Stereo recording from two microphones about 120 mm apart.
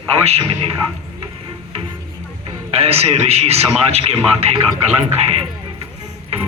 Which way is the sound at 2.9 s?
60° right (ahead or behind).